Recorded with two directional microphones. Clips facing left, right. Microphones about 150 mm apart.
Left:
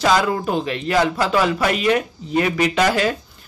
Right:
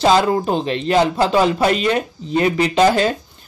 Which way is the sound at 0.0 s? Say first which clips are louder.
Right 3 dB; 30° right (ahead or behind).